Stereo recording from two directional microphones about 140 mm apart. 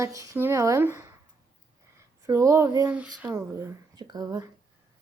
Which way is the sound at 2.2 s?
20° right (ahead or behind).